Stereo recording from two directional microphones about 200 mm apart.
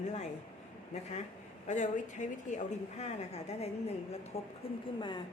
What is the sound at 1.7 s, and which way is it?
A woman's voice, 35° left (ahead or behind).